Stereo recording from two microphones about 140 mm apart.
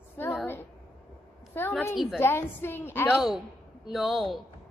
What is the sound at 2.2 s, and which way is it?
Speech, 15° left (ahead or behind).